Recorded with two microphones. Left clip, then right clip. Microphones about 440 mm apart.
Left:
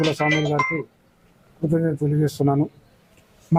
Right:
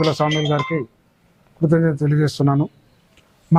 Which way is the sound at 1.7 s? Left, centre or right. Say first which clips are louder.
Right 3 dB; right.